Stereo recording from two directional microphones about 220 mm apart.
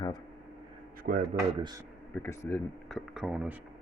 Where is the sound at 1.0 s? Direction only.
40° right (ahead or behind).